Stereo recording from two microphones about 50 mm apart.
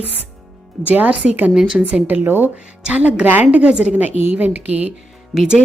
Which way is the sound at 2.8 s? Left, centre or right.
Right.